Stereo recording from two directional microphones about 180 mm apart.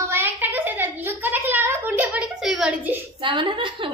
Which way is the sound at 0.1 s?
10° right (ahead or behind).